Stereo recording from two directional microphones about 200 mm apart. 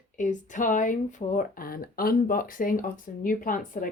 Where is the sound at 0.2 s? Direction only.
40° left (ahead or behind).